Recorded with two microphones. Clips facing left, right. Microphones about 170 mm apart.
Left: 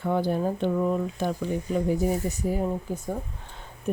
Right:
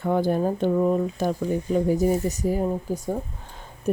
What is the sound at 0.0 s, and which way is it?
Speech, 45° right (ahead or behind).